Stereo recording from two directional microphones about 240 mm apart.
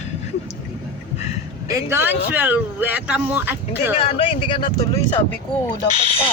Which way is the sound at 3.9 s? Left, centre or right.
Left.